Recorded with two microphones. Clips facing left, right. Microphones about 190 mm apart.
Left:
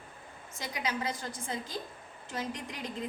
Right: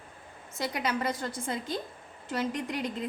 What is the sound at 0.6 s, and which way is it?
A woman's voice, 60° right (ahead or behind).